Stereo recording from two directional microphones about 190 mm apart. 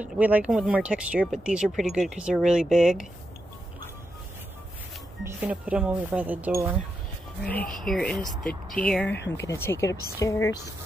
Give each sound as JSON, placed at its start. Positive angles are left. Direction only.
{"t": 0.0, "sound": "speech", "side_deg": -10}
{"t": 5.2, "sound": "speech", "side_deg": -5}
{"t": 7.8, "sound": "speech", "side_deg": 0}